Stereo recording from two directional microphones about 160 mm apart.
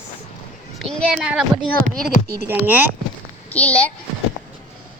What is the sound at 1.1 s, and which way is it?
Speech, 5° right (ahead or behind).